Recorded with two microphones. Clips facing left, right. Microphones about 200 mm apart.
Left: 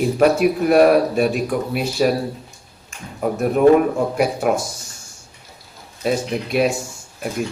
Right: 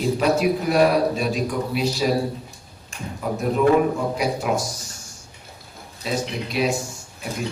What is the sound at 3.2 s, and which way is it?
A man's voice, 55° left (ahead or behind).